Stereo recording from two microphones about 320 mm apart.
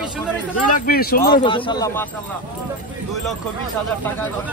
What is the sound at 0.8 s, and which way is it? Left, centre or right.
Speech, left.